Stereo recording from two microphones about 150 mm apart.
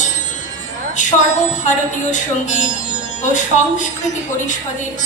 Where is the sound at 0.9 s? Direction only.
55° left (ahead or behind).